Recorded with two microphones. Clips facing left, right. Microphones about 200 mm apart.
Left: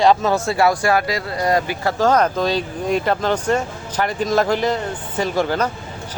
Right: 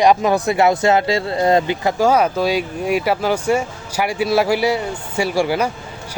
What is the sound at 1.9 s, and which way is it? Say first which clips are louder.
Speech: even; 10° right (ahead or behind).